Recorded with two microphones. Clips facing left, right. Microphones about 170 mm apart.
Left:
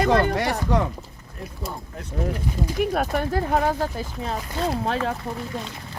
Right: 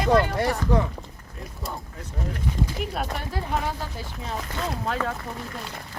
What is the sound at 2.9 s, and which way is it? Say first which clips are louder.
Speech: left 7 dB; 50° left (ahead or behind).